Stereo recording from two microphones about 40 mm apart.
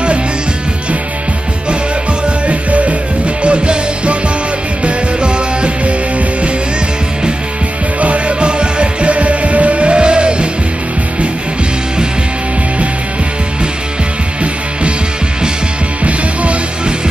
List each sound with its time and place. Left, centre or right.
2.2 s music: right
8.0 s music: right
16.0 s music: right